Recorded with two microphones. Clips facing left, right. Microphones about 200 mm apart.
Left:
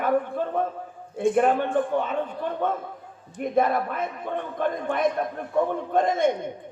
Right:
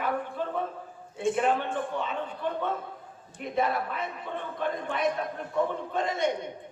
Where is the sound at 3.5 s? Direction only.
50° left (ahead or behind).